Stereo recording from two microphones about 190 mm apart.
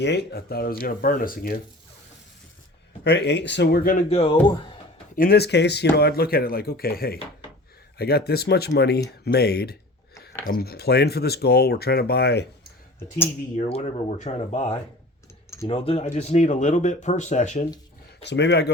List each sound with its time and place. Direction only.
0.0 s speech: 60° left (ahead or behind)
3.0 s speech: 60° left (ahead or behind)
3.8 s speech: 35° left (ahead or behind)
5.1 s speech: 50° left (ahead or behind)
13.7 s speech: 35° left (ahead or behind)
15.4 s typing: 15° left (ahead or behind)
15.7 s speech: 30° left (ahead or behind)
18.2 s speech: 65° left (ahead or behind)